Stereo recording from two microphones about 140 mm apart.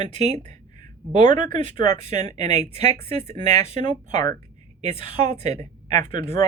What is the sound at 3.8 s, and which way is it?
Speech, 30° left (ahead or behind).